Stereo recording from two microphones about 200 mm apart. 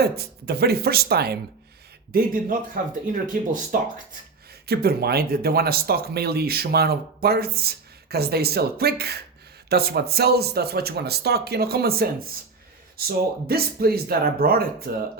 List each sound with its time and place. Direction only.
0.0 s speech: 50° right (ahead or behind)
13.1 s speech: 50° right (ahead or behind)